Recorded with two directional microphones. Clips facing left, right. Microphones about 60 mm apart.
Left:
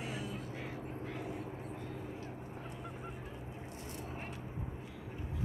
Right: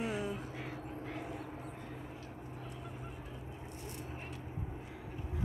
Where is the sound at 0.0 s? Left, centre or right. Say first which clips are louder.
Right 5 dB; right.